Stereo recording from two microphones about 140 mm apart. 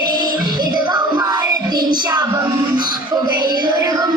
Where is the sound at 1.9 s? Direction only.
30° right (ahead or behind).